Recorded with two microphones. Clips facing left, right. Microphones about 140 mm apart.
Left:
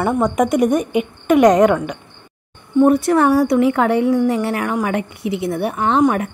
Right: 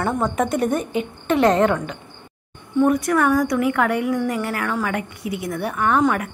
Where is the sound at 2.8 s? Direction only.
30° left (ahead or behind).